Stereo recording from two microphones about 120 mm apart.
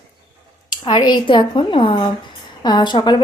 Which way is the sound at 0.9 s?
40° left (ahead or behind).